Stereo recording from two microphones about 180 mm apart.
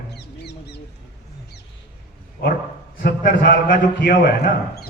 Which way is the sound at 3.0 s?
50° left (ahead or behind).